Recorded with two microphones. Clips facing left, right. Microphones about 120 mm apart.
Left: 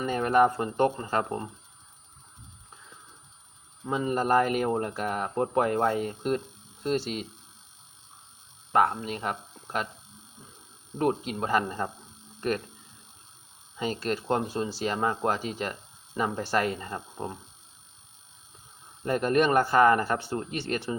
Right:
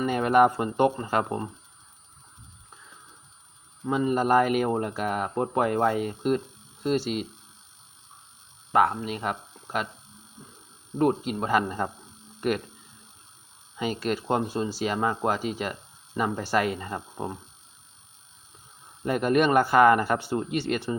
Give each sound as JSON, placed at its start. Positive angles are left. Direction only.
{"t": 0.2, "sound": "speech", "side_deg": -15}
{"t": 3.8, "sound": "speech", "side_deg": 0}
{"t": 9.0, "sound": "speech", "side_deg": -5}
{"t": 11.0, "sound": "speech", "side_deg": 0}
{"t": 11.3, "sound": "speech", "side_deg": -10}
{"t": 14.1, "sound": "speech", "side_deg": -10}
{"t": 16.7, "sound": "speech", "side_deg": -15}
{"t": 19.0, "sound": "speech", "side_deg": -10}